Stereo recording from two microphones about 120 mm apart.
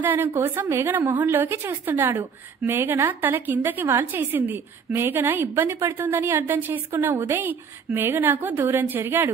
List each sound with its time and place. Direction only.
0.0 s a woman's voice: 15° right (ahead or behind)